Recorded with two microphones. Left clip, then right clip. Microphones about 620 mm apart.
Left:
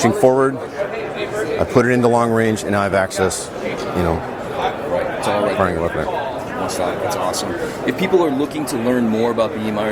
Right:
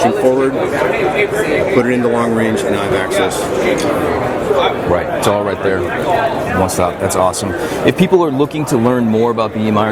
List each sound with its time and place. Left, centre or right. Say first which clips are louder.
7.9 s speech: right 4 dB; right